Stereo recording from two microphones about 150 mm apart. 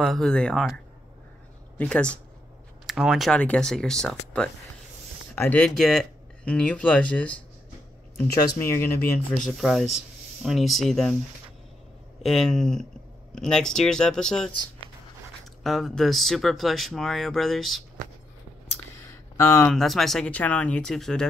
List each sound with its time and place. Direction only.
0.0 s speech: centre (ahead or behind)
1.8 s speech: 5° left (ahead or behind)
9.6 s speech: centre (ahead or behind)
12.2 s speech: centre (ahead or behind)
15.6 s speech: centre (ahead or behind)
19.3 s speech: 15° left (ahead or behind)
19.7 s speech: centre (ahead or behind)